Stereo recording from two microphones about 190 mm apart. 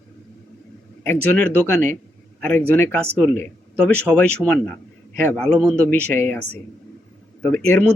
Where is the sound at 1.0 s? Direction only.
10° left (ahead or behind).